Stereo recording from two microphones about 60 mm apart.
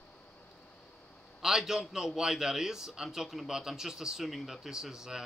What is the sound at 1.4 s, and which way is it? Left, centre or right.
A man's voice, centre.